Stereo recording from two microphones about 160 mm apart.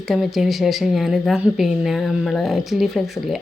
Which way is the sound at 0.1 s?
Centre (ahead or behind).